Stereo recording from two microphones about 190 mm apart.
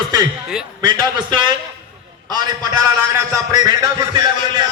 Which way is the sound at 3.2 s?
20° right (ahead or behind).